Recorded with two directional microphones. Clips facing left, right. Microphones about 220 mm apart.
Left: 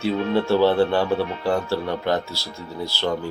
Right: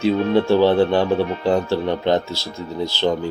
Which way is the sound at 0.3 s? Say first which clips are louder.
Right 2 dB; 15° right (ahead or behind).